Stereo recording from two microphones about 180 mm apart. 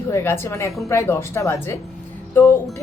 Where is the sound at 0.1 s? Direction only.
15° left (ahead or behind).